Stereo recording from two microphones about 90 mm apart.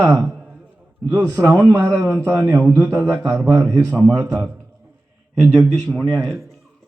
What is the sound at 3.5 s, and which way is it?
Speech, 40° right (ahead or behind).